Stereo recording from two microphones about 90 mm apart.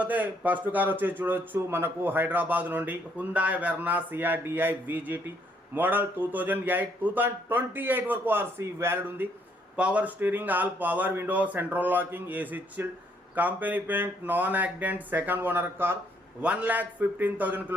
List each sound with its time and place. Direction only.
0.0 s speech: 15° right (ahead or behind)
9.7 s speech: 15° right (ahead or behind)
16.4 s speech: 15° right (ahead or behind)